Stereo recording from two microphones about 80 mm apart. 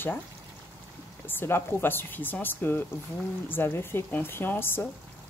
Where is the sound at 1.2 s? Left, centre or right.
Left.